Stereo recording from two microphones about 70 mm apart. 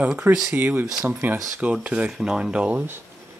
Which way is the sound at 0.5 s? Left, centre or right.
Right.